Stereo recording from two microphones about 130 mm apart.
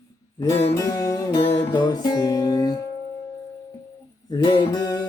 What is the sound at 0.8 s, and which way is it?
Music, 25° left (ahead or behind).